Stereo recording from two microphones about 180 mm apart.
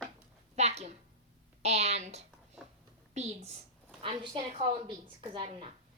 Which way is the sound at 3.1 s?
40° right (ahead or behind).